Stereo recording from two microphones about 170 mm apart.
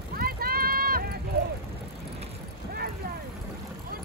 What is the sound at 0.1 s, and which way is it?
Run, 60° right (ahead or behind).